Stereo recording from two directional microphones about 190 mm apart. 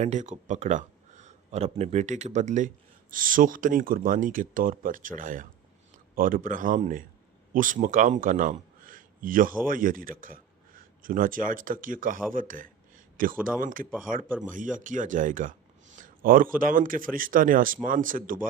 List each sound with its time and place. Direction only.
0.0 s speech: 40° right (ahead or behind)
14.3 s speech: 10° right (ahead or behind)
14.5 s speech: 45° right (ahead or behind)